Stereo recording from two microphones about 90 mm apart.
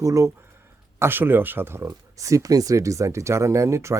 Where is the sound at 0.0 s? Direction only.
35° right (ahead or behind).